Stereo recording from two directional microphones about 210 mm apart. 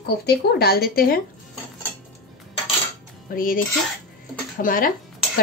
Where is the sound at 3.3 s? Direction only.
40° left (ahead or behind).